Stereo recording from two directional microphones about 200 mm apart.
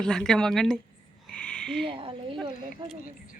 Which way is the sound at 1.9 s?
25° right (ahead or behind).